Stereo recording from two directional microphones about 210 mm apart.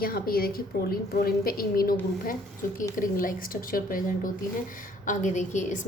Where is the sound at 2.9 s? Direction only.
40° left (ahead or behind).